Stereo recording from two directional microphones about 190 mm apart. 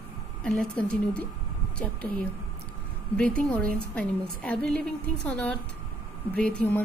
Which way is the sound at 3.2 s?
5° left (ahead or behind).